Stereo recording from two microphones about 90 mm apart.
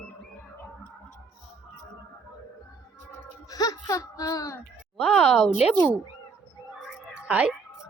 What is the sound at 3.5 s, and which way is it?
Speech, 45° left (ahead or behind).